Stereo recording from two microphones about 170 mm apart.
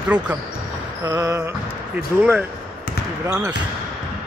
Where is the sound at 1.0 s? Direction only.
20° right (ahead or behind).